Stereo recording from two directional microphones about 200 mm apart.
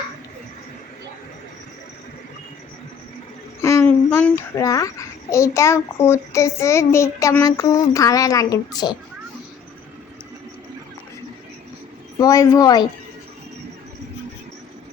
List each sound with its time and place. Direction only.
3.6 s a child's voice: 15° left (ahead or behind)
12.2 s a child's voice: 15° left (ahead or behind)